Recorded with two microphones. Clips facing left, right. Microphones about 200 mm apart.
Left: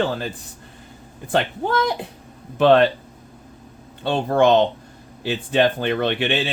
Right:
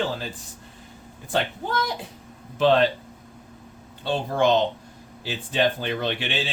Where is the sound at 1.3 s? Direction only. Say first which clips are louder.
Left 5 dB; 60° left (ahead or behind).